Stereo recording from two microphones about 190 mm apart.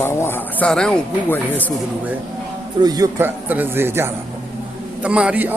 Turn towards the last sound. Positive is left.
turn(degrees=-5)  # may be behind; listen again after turning